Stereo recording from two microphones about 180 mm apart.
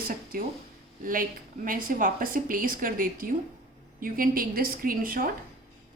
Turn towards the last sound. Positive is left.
turn(degrees=-55)  # may be behind; listen again after turning